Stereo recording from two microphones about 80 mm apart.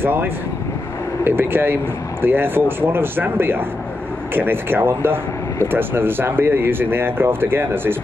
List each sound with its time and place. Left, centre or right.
0.0 s speech: right